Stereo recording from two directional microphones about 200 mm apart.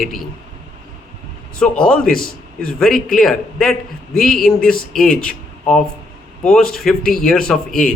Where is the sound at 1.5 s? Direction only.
5° left (ahead or behind).